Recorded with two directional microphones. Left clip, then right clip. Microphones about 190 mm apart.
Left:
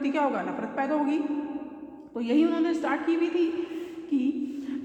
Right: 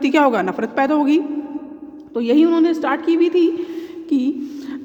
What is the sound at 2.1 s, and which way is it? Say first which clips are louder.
A woman's voice: right 10 dB; 35° right (ahead or behind).